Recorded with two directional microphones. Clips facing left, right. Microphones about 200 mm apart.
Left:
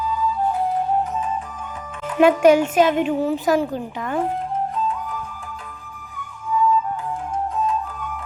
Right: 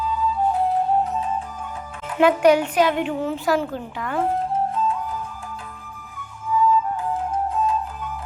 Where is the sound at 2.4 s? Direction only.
25° left (ahead or behind).